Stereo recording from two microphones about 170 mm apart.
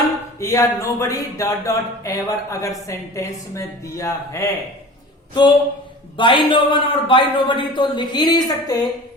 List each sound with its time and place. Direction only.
0.3 s speech: 20° left (ahead or behind)